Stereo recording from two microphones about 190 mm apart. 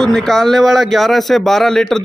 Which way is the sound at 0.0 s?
5° left (ahead or behind).